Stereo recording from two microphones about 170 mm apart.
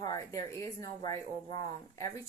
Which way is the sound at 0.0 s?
20° left (ahead or behind).